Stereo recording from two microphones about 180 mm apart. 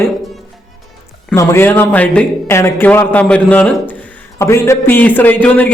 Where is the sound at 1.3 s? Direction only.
15° left (ahead or behind).